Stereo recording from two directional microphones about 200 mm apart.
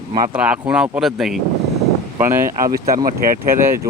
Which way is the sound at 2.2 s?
10° right (ahead or behind).